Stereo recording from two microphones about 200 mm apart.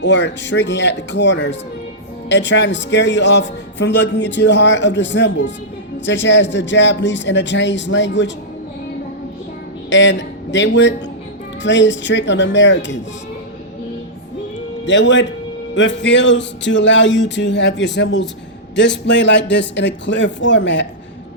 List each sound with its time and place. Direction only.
0.0 s speech: 60° left (ahead or behind)
9.9 s speech: 65° left (ahead or behind)
14.8 s a man's voice: 65° left (ahead or behind)